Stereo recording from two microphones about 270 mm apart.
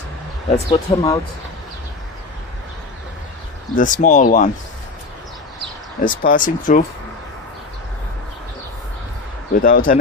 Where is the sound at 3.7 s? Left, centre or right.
Left.